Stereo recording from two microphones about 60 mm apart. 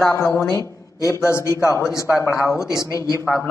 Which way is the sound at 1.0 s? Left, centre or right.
Left.